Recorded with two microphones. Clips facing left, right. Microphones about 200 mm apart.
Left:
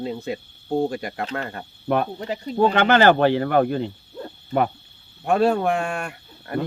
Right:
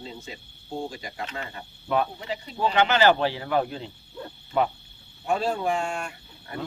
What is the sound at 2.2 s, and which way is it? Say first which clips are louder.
Speech: left 8 dB; 45° left (ahead or behind).